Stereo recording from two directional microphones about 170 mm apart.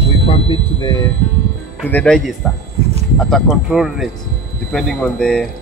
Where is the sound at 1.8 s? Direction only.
5° left (ahead or behind).